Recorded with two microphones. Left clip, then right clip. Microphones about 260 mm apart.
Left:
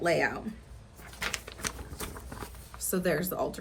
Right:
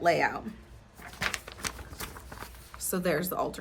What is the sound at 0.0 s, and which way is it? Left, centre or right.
Speech, centre.